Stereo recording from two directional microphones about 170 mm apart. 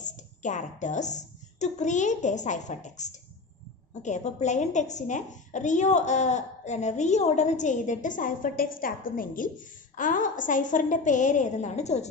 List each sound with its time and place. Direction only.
0.0 s a woman's voice: 45° left (ahead or behind)